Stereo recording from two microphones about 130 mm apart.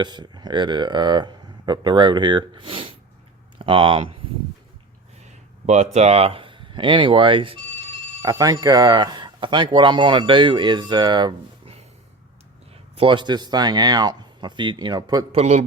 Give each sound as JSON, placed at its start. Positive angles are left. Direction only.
{"t": 0.0, "sound": "speech", "side_deg": -35}
{"t": 5.6, "sound": "speech", "side_deg": -60}
{"t": 8.2, "sound": "speech", "side_deg": -30}
{"t": 13.0, "sound": "speech", "side_deg": -40}
{"t": 15.3, "sound": "speech", "side_deg": -55}